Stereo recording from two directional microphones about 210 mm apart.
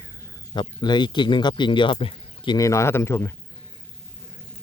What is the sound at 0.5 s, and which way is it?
Speech, 20° left (ahead or behind).